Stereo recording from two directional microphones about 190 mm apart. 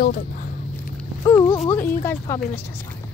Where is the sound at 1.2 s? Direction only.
15° left (ahead or behind).